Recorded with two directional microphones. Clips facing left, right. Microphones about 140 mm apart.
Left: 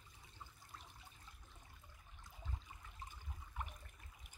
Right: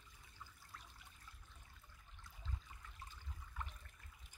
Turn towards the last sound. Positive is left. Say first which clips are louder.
# left 2 dB
turn(degrees=15)  # may be behind; listen again after turning